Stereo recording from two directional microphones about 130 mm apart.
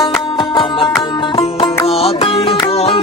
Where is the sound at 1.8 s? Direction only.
50° left (ahead or behind).